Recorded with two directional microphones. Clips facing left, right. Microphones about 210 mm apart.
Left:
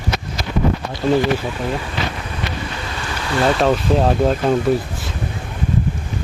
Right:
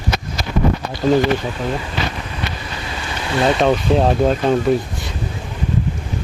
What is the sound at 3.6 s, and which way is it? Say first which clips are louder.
Speech: right 1 dB; centre (ahead or behind).